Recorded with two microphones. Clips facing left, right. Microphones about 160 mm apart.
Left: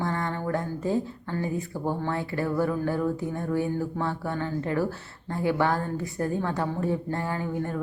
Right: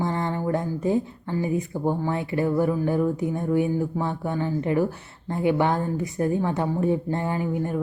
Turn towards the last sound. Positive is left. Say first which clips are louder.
# right 4 dB
turn(degrees=-15)  # may be behind; listen again after turning